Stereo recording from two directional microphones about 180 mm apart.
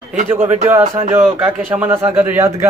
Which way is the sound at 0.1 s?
40° right (ahead or behind).